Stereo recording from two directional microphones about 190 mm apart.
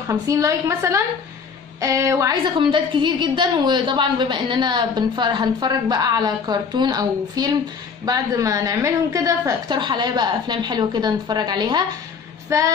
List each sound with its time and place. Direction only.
0.1 s a woman's voice: 15° right (ahead or behind)